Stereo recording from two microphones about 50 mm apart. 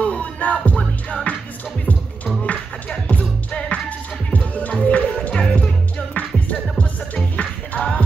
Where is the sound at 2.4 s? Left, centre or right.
Left.